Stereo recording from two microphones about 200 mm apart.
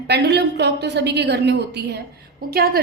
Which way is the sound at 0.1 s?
55° right (ahead or behind).